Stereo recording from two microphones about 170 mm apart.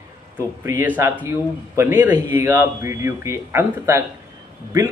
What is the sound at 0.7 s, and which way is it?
A man's voice, 10° right (ahead or behind).